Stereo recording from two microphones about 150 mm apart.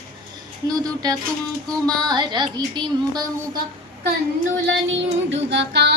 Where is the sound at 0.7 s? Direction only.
25° right (ahead or behind).